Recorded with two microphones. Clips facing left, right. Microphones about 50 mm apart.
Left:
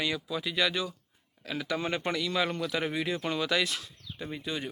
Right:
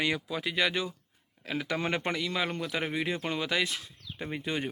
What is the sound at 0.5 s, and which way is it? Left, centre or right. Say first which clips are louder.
Speech: even; right.